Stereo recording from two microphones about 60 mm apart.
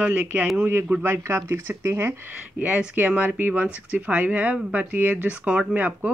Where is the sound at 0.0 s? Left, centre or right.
Right.